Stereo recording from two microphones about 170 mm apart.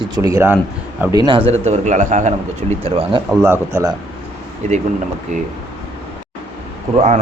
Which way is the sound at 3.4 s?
15° right (ahead or behind).